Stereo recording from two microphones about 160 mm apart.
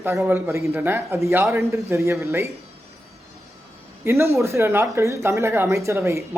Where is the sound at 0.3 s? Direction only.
15° right (ahead or behind).